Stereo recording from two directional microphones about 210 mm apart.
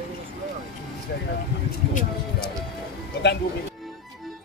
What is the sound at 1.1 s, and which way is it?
Speech, 50° left (ahead or behind).